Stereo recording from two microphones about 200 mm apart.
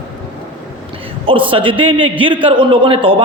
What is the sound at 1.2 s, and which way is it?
A man's voice, 25° right (ahead or behind).